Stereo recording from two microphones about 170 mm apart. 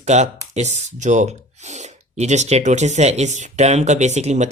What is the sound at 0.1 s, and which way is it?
Speech, 40° right (ahead or behind).